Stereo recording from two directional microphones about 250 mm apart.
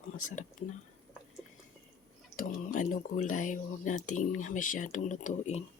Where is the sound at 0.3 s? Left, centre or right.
Left.